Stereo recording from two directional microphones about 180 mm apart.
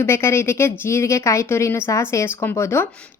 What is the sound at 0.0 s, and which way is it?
A woman's voice, 15° left (ahead or behind).